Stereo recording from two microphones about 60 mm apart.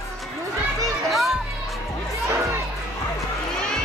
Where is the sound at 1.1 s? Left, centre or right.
Centre.